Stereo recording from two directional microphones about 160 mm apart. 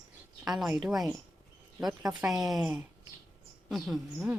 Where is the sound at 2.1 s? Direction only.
25° right (ahead or behind).